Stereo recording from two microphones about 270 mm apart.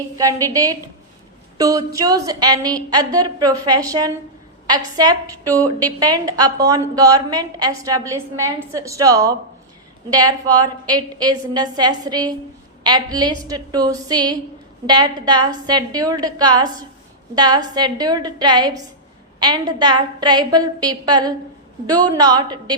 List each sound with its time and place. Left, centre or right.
0.2 s a woman's voice: centre